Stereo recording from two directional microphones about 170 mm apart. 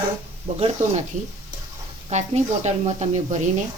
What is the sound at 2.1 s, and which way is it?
Speech, 40° right (ahead or behind).